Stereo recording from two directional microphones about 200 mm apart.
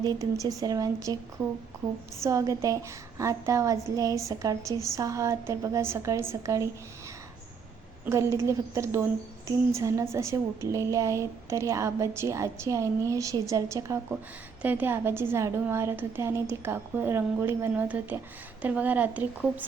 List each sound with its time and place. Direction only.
0.0 s a woman's voice: 15° right (ahead or behind)
2.2 s a woman's voice: 15° right (ahead or behind)
8.0 s a woman's voice: 15° right (ahead or behind)